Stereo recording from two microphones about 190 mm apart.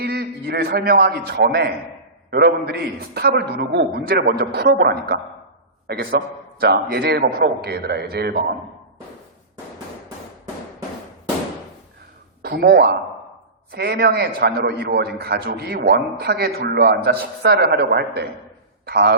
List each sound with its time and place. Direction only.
0.0 s a man's voice: 55° right (ahead or behind)
12.4 s a man's voice: 55° right (ahead or behind)